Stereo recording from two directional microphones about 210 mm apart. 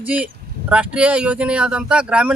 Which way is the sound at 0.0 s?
5° right (ahead or behind).